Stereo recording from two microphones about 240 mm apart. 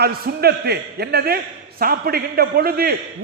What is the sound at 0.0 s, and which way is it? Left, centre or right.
A man's voice, right.